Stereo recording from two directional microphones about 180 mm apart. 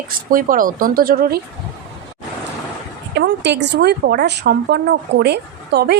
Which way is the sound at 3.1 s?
70° right (ahead or behind).